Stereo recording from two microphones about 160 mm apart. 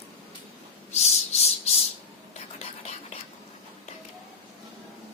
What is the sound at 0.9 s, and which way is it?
Rub, 45° left (ahead or behind).